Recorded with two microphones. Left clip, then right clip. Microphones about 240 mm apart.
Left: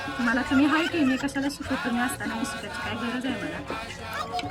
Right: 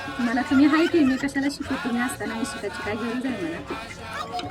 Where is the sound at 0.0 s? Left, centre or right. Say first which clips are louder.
Even; centre.